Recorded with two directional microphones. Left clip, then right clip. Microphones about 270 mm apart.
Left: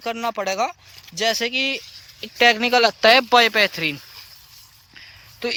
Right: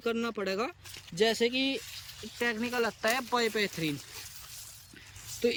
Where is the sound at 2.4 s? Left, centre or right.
Left.